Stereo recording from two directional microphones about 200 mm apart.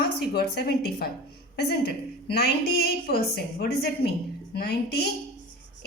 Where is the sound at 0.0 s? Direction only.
50° left (ahead or behind).